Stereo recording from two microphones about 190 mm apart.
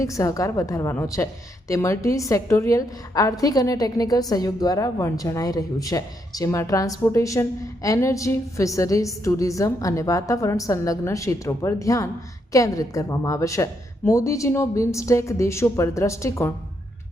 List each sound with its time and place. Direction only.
0.0 s a woman's voice: 15° left (ahead or behind)